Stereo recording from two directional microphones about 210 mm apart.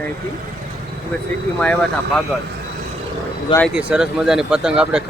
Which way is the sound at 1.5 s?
5° left (ahead or behind).